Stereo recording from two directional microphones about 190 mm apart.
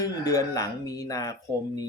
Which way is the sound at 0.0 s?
20° left (ahead or behind).